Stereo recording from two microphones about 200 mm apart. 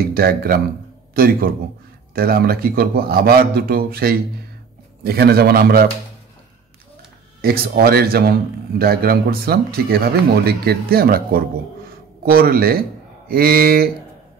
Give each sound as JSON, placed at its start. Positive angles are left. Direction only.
{"t": 0.0, "sound": "a man's voice", "side_deg": -50}
{"t": 7.4, "sound": "a man's voice", "side_deg": -50}